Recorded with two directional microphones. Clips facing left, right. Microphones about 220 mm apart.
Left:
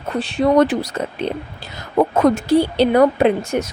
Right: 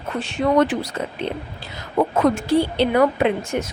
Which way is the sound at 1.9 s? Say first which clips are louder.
Left 3 dB; 40° left (ahead or behind).